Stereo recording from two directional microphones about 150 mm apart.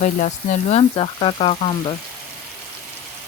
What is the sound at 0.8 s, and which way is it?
Speech, 40° left (ahead or behind).